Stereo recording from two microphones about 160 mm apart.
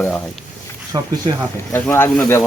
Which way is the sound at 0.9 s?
30° right (ahead or behind).